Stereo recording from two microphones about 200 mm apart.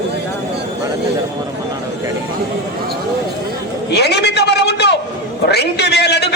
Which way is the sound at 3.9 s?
55° left (ahead or behind).